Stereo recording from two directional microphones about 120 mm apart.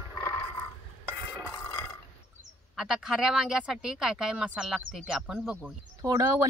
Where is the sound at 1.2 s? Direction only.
15° left (ahead or behind).